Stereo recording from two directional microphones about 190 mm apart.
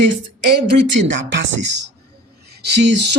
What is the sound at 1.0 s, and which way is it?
Speech, 65° right (ahead or behind).